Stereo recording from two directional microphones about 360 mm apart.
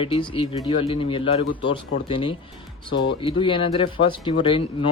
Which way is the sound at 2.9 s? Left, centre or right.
Left.